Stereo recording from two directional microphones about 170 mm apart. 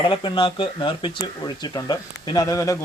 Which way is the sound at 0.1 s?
30° left (ahead or behind).